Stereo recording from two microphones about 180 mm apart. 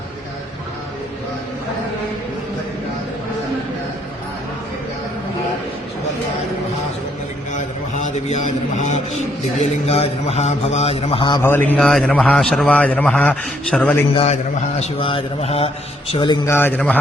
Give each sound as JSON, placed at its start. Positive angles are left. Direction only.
{"t": 7.5, "sound": "a sound", "side_deg": 40}
{"t": 9.6, "sound": "a man's voice", "side_deg": 35}
{"t": 11.4, "sound": "a man's voice", "side_deg": 10}
{"t": 14.8, "sound": "a man's voice", "side_deg": 30}
{"t": 16.5, "sound": "a man's voice", "side_deg": 10}